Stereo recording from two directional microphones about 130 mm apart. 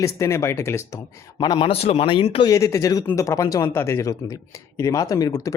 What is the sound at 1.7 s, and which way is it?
Speech, 50° left (ahead or behind).